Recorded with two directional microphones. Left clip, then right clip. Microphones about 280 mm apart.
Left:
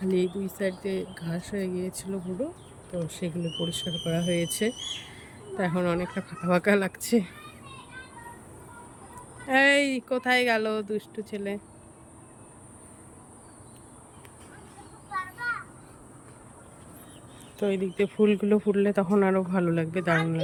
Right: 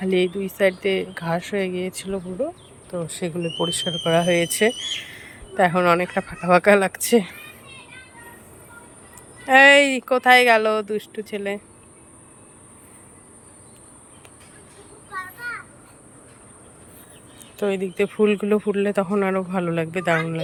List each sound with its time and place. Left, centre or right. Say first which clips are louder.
0.1 s speech: right 6 dB; centre
1.1 s speech: right 13 dB; right
1.4 s speech: right 7 dB; centre
9.1 s speech: right 9 dB; centre
17.6 s speech: right 4 dB; centre